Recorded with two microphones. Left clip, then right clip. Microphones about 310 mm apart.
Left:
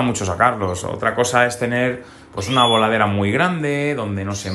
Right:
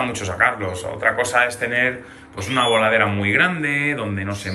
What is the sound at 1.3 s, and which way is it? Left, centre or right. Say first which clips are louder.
Speech: left 1 dB; centre.